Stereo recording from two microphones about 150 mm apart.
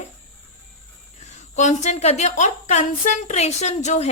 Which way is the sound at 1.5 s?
50° left (ahead or behind).